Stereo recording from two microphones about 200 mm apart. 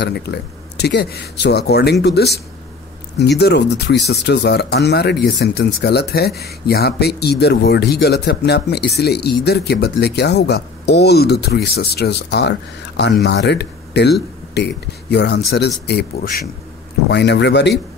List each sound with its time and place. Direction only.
0.0 s speech: 55° left (ahead or behind)